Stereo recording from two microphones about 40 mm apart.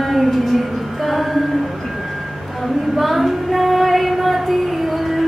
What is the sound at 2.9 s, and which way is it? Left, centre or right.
Female singing, centre.